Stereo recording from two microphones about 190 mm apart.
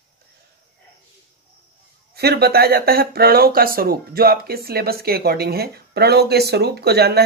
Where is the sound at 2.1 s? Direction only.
55° right (ahead or behind).